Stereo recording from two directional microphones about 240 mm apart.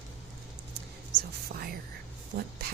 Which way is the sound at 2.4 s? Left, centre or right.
Right.